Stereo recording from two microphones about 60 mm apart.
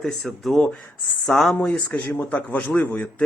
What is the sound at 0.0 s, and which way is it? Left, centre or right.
Speech, centre.